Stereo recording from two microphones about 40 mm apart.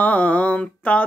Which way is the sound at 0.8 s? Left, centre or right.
Left.